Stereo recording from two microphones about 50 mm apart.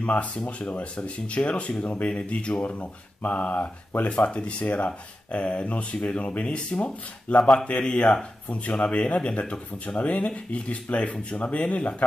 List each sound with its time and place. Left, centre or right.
0.0 s speech: left
2.6 s speech: left